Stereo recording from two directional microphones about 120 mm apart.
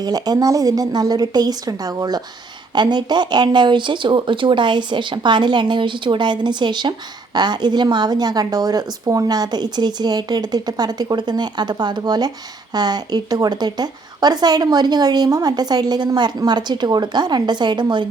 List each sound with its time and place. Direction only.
0.0 s a woman's voice: 35° right (ahead or behind)